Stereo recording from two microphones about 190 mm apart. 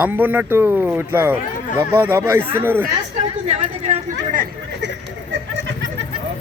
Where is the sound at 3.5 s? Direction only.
35° right (ahead or behind).